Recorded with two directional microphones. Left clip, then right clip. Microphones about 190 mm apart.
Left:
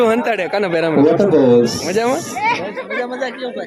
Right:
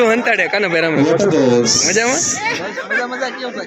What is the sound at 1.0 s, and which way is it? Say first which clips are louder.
Speech: left 4 dB; 55° left (ahead or behind).